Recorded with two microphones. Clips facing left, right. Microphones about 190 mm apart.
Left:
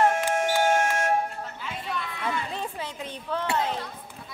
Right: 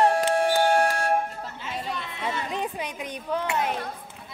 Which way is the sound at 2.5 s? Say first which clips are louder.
Right 3 dB; 15° right (ahead or behind).